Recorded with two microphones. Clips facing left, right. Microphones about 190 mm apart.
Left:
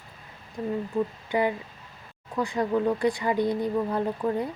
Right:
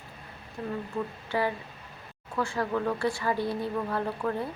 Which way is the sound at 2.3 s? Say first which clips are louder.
Left 4 dB; 20° left (ahead or behind).